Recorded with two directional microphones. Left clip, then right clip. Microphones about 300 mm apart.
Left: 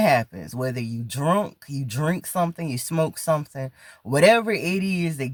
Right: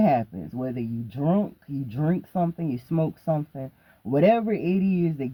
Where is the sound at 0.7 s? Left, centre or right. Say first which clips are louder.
Left 1 dB; left.